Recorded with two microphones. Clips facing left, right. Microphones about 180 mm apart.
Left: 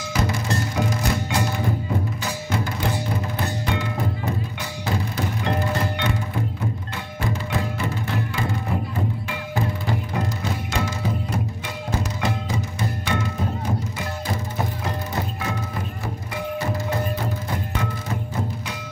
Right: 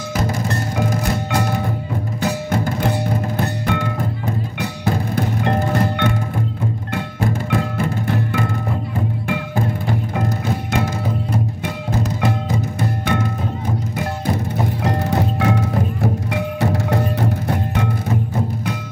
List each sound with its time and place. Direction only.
0.1 s music: 50° right (ahead or behind)
10.4 s music: 55° right (ahead or behind)
12.2 s music: 55° right (ahead or behind)
13.9 s music: 65° right (ahead or behind)